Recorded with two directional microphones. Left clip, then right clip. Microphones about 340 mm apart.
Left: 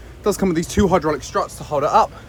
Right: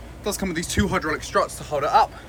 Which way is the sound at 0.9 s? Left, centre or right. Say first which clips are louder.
Left 5 dB; centre.